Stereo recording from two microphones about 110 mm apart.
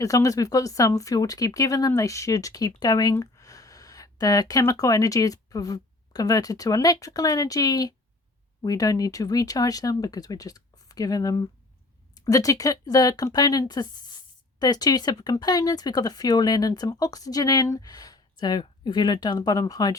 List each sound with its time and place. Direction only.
0.0 s speech: 30° left (ahead or behind)